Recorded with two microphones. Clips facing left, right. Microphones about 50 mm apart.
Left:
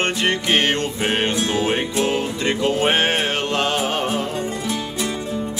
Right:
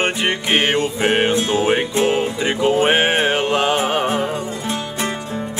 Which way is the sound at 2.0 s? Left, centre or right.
Centre.